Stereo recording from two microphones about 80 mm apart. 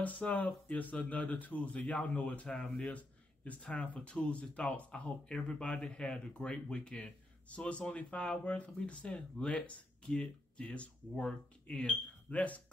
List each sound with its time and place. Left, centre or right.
0.0 s speech: centre